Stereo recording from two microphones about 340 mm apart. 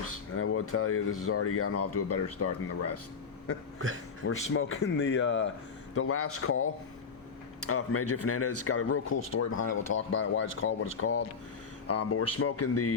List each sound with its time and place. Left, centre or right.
0.0 s speech: left
4.2 s speech: left
10.1 s speech: left